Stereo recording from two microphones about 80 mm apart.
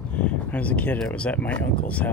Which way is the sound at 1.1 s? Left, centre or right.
Centre.